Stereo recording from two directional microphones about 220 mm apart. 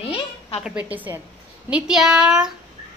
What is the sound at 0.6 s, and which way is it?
A woman's voice, 5° right (ahead or behind).